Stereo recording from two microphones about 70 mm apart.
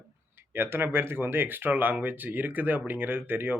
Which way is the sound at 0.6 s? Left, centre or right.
Right.